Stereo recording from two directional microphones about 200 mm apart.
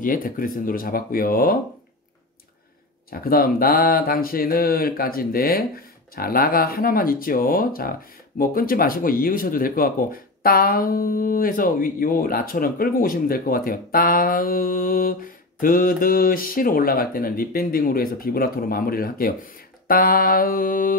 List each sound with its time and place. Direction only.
0.0 s speech: 45° left (ahead or behind)
3.1 s speech: 45° left (ahead or behind)